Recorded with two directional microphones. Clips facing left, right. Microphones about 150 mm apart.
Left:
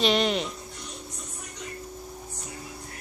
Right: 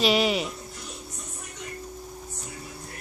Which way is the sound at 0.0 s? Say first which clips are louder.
Right 1 dB; 5° right (ahead or behind).